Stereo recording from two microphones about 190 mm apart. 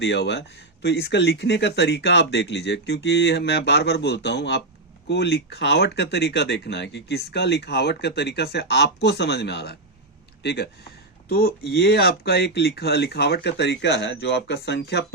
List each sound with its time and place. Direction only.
0.0 s speech: 65° left (ahead or behind)